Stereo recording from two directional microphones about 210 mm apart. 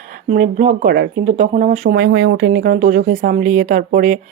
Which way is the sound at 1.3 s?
35° right (ahead or behind).